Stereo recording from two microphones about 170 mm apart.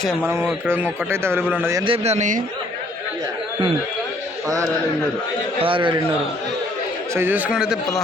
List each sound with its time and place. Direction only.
0.0 s a man's voice: 5° left (ahead or behind)
0.7 s a man's voice: 15° right (ahead or behind)
1.8 s a man's voice: 35° right (ahead or behind)
5.5 s a man's voice: 30° right (ahead or behind)
7.1 s a man's voice: 10° right (ahead or behind)